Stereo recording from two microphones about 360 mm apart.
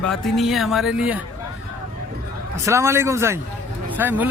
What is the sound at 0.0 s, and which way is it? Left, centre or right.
A man's voice, centre.